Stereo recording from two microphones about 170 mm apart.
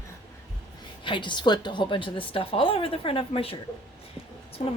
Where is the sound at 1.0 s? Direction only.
30° left (ahead or behind).